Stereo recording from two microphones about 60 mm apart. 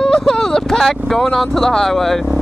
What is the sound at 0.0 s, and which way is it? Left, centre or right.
Speech, centre.